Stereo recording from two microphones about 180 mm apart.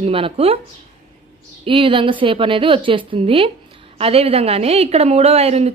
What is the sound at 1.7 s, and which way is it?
A woman's voice, 30° right (ahead or behind).